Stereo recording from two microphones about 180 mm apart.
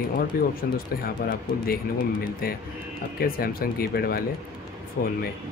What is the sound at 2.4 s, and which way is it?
Speech, 55° left (ahead or behind).